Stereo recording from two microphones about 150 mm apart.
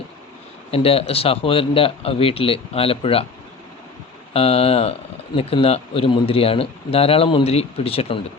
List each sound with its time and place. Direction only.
0.7 s speech: 40° left (ahead or behind)
4.4 s speech: 40° left (ahead or behind)